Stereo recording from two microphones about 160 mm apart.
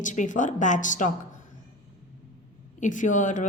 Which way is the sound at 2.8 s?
50° left (ahead or behind).